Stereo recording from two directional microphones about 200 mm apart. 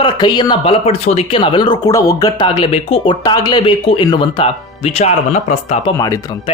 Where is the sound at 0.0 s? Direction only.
20° left (ahead or behind).